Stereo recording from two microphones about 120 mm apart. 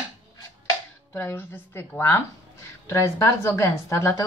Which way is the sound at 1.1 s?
20° left (ahead or behind).